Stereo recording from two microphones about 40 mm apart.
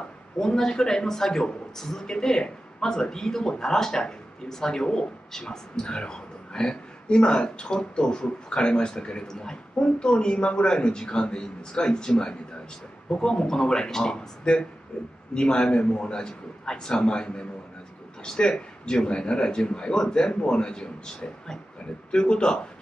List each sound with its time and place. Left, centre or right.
0.4 s a man's voice: centre